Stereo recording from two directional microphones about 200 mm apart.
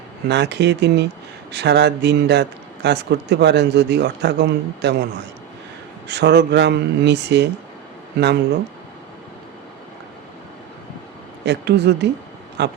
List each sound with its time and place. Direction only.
0.3 s speech: 60° right (ahead or behind)
6.1 s speech: 60° right (ahead or behind)
11.4 s speech: 60° right (ahead or behind)